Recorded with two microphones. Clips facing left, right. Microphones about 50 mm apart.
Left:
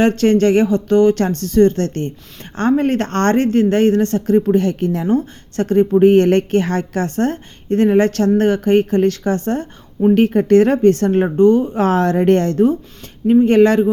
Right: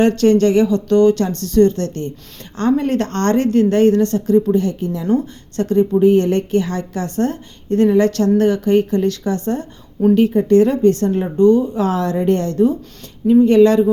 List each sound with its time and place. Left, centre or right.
0.0 s a woman's voice: left
5.1 s a woman's voice: left
6.1 s a woman's voice: left
11.3 s a woman's voice: left